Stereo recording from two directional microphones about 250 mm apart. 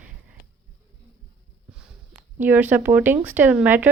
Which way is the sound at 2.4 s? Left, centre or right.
Centre.